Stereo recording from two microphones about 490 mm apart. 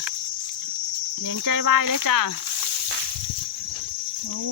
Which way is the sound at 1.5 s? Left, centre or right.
Right.